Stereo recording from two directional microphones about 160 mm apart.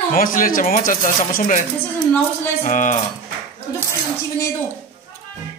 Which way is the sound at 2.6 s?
50° left (ahead or behind).